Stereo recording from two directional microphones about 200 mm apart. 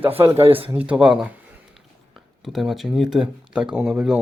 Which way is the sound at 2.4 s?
Centre (ahead or behind).